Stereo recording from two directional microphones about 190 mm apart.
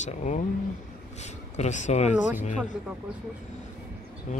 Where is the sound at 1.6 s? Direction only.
40° left (ahead or behind).